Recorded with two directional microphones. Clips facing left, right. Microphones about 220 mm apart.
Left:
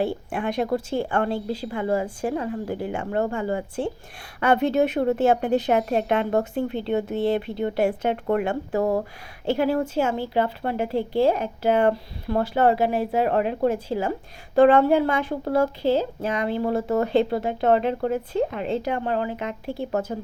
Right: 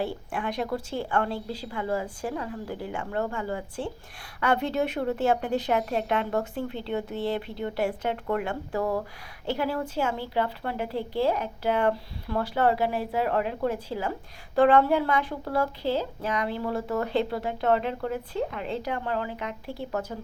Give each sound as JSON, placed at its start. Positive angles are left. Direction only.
{"t": 0.0, "sound": "a woman's voice", "side_deg": 20}